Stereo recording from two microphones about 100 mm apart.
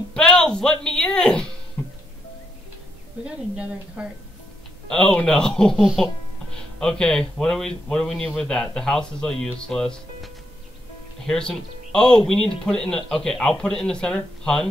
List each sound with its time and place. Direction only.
0.1 s speech: 10° left (ahead or behind)
1.8 s music: 20° left (ahead or behind)
3.5 s a woman's voice: 10° right (ahead or behind)
4.8 s speech: 5° left (ahead or behind)